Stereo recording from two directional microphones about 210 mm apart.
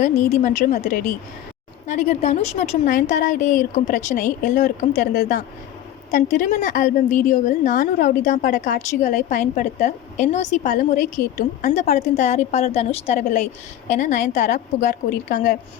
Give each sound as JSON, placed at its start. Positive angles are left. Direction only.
{"t": 0.0, "sound": "a woman's voice", "side_deg": 40}
{"t": 5.1, "sound": "a woman's voice", "side_deg": 50}
{"t": 6.1, "sound": "a woman's voice", "side_deg": 35}